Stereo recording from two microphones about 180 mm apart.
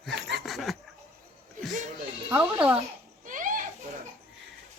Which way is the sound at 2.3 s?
5° right (ahead or behind).